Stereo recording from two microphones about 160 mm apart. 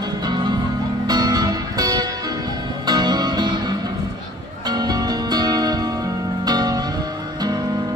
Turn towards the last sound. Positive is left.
turn(degrees=-25)  # may be behind; listen again after turning